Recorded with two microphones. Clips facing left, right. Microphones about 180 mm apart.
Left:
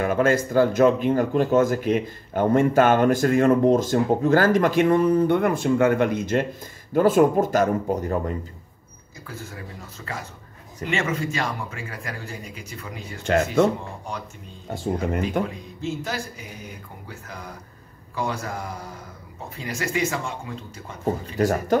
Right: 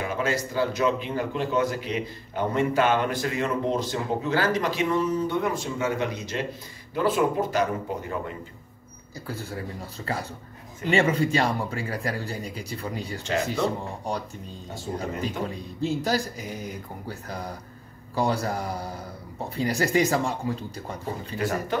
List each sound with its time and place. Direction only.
0.0 s speech: 50° left (ahead or behind)
9.3 s speech: 35° right (ahead or behind)
13.2 s speech: 60° left (ahead or behind)
15.4 s speech: 35° right (ahead or behind)
21.4 s speech: 40° left (ahead or behind)